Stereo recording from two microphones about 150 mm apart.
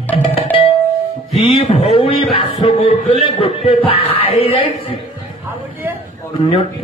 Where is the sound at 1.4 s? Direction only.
40° left (ahead or behind).